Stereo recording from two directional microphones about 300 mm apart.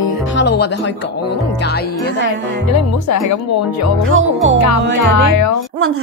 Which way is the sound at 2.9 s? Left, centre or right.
Left.